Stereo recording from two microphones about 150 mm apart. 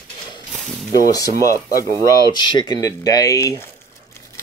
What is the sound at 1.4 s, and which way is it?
Speech, 20° left (ahead or behind).